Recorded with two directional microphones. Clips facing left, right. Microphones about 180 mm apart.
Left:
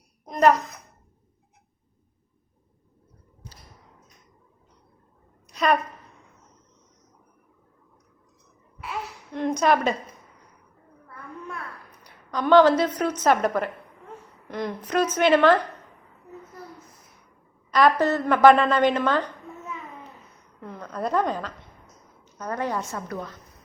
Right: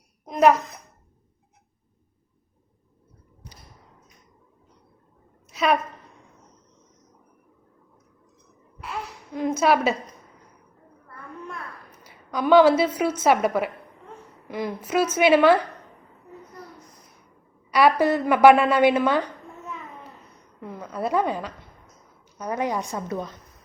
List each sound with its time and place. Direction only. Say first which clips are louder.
0.3 s a sound: right 1 dB; 10° right (ahead or behind)
5.5 s a sound: even; 5° right (ahead or behind)
8.8 s babbling: even; centre (ahead or behind)
12.0 s a woman's voice: right 1 dB; 10° right (ahead or behind)
17.7 s a woman's voice: right 1 dB; 10° right (ahead or behind)
20.6 s a woman's voice: right 1 dB; 10° right (ahead or behind)